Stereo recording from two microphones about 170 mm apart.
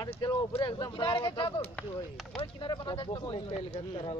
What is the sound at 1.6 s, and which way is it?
Speech, 10° left (ahead or behind).